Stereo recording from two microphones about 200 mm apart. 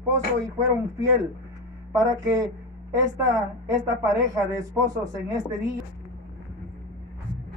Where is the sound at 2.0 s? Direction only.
15° right (ahead or behind).